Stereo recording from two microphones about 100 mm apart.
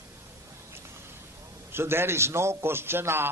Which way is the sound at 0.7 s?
25° right (ahead or behind).